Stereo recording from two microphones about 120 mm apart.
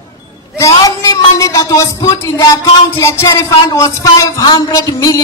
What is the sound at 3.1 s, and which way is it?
Speech, 20° left (ahead or behind).